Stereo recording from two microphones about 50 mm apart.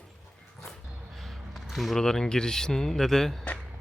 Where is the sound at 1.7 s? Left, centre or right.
Centre.